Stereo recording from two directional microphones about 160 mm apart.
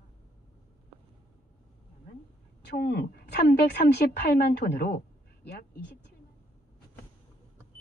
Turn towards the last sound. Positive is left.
turn(degrees=70)  # may be behind; listen again after turning